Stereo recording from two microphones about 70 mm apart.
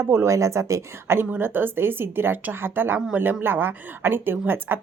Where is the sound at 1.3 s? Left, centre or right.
Right.